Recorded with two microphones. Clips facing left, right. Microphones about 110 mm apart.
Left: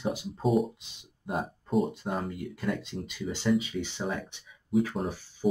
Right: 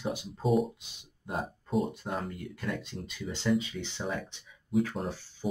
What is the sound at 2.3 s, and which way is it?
Speech, 15° left (ahead or behind).